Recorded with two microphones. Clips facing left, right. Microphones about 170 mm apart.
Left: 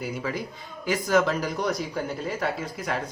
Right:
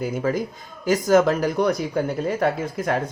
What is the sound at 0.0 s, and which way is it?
Speech, 45° right (ahead or behind).